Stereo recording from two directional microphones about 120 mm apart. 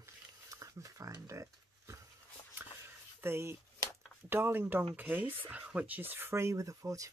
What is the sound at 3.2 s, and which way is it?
Speech, 20° right (ahead or behind).